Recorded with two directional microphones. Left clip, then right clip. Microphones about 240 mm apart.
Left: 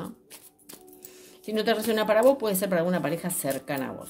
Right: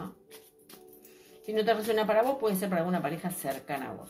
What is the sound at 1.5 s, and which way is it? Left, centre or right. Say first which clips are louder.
Speech: left 2 dB; left.